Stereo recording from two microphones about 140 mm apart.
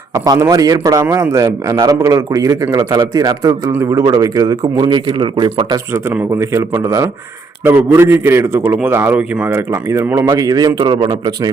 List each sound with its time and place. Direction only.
0.1 s speech: 25° right (ahead or behind)
6.4 s a man's voice: 20° right (ahead or behind)